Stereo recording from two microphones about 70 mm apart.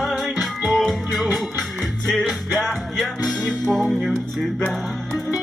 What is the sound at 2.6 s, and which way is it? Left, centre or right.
Music, centre.